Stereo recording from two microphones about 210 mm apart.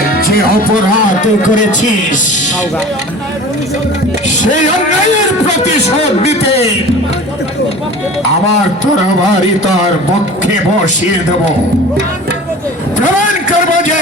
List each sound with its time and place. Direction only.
1.2 s a man's voice: 35° left (ahead or behind)
5.6 s a man's voice: 30° left (ahead or behind)